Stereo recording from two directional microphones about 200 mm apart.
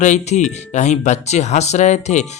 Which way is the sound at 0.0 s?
35° left (ahead or behind).